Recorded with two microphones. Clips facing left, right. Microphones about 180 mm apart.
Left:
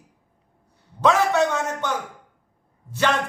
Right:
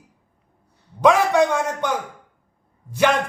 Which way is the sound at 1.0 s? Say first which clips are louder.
Right 3 dB; 15° right (ahead or behind).